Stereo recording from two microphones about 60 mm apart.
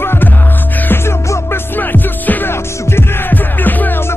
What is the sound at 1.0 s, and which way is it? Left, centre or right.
Music, left.